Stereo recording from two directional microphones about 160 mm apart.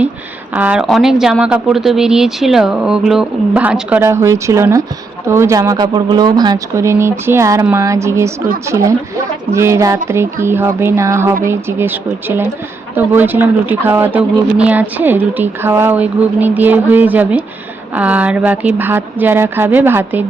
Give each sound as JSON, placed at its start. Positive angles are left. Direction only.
{"t": 0.5, "sound": "speech", "side_deg": -10}
{"t": 9.5, "sound": "speech", "side_deg": -15}
{"t": 13.0, "sound": "speech", "side_deg": -10}